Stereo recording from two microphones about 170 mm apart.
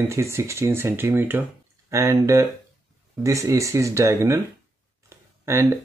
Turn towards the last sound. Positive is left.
turn(degrees=-15)  # may be behind; listen again after turning